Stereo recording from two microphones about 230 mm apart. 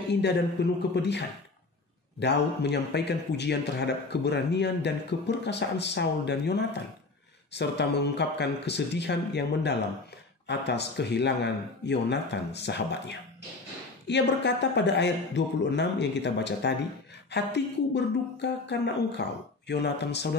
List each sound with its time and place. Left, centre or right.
0.6 s a man's voice: left
2.1 s a man's voice: left